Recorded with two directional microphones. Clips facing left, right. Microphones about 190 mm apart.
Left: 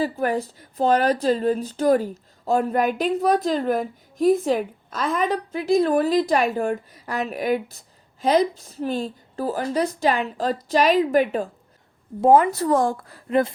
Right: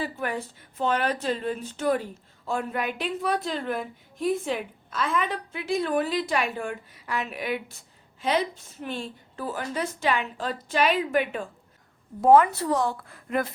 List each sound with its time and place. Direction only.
0.0 s speech: 40° left (ahead or behind)